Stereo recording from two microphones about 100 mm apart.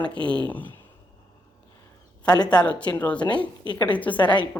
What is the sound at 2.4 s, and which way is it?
Speech, 10° left (ahead or behind).